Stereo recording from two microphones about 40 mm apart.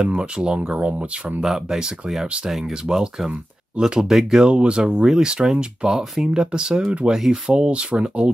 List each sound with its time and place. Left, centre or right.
0.2 s speech: right
1.4 s speech: centre; by 3.9 s right
4.1 s speech: centre
4.4 s speech: right